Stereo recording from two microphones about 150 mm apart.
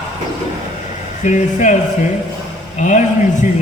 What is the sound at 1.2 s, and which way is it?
A man's voice, 55° left (ahead or behind).